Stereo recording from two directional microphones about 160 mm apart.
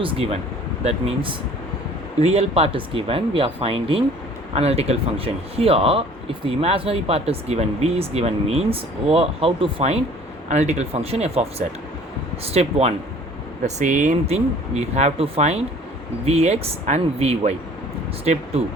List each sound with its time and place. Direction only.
0.0 s speech: 35° right (ahead or behind)
12.5 s speech: 40° right (ahead or behind)